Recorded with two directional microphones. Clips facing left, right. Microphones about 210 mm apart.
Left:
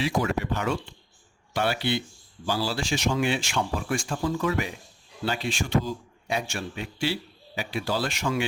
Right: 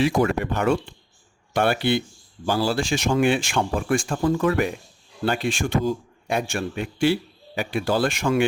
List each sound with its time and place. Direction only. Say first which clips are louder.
0.0 s a man's voice: right 6 dB; 50° right (ahead or behind)